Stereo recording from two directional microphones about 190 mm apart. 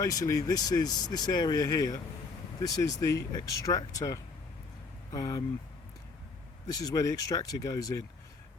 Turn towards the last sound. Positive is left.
turn(degrees=20)  # may be behind; listen again after turning